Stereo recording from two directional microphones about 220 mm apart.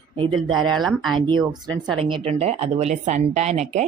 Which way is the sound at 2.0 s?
25° right (ahead or behind).